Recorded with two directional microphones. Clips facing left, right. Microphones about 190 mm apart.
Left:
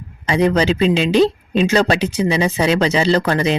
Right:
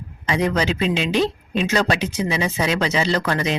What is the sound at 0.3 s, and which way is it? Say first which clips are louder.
Speech: left 5 dB; 30° left (ahead or behind).